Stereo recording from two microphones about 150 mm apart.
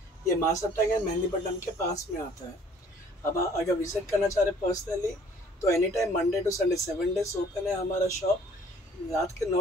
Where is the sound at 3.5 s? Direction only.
20° left (ahead or behind).